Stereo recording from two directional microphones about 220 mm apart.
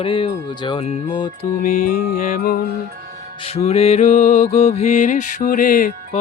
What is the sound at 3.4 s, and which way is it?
Music, 30° left (ahead or behind).